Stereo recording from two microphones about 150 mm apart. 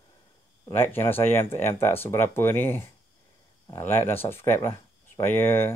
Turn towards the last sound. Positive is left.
turn(degrees=15)  # may be behind; listen again after turning